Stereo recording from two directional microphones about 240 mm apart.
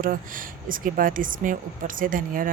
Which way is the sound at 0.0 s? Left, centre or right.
Right.